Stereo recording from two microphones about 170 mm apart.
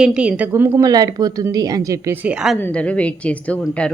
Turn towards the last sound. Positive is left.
turn(degrees=10)  # may be behind; listen again after turning